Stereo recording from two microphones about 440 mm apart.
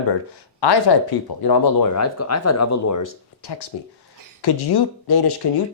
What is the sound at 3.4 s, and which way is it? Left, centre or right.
Speech, left.